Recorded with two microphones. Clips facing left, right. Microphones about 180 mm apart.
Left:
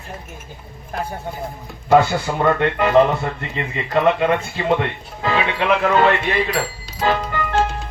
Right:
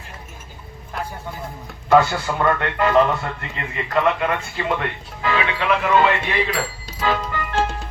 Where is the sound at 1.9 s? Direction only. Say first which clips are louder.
Left 1 dB; 20° left (ahead or behind).